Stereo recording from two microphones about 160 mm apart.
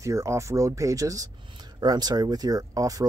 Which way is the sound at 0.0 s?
20° right (ahead or behind).